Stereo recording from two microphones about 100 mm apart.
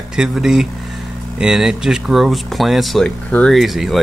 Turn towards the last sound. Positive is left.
turn(degrees=0)  # may be behind; listen again after turning